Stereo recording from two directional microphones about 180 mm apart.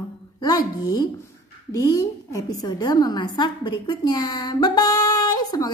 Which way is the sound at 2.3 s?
20° left (ahead or behind).